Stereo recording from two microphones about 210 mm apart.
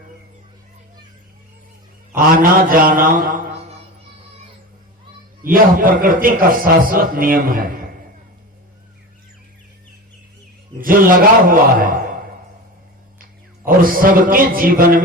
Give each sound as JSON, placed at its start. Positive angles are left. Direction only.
{"t": 2.1, "sound": "a man's voice", "side_deg": -40}
{"t": 5.5, "sound": "a man's voice", "side_deg": -40}
{"t": 10.8, "sound": "a man's voice", "side_deg": -40}
{"t": 13.7, "sound": "a man's voice", "side_deg": -40}